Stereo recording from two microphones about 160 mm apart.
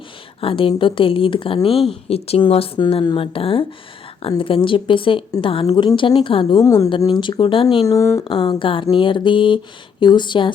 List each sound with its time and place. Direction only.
0.4 s speech: 35° left (ahead or behind)
7.0 s speech: 30° left (ahead or behind)
8.3 s speech: 35° left (ahead or behind)